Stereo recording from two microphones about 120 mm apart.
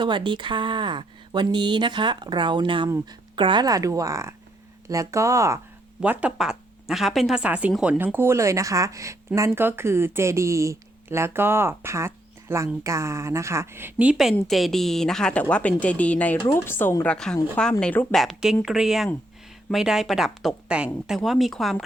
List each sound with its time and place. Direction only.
0.0 s a woman's voice: 40° right (ahead or behind); by 5.5 s 25° right (ahead or behind)
6.0 s speech: 10° right (ahead or behind)
7.9 s a woman's voice: 15° right (ahead or behind); by 21.8 s centre (ahead or behind)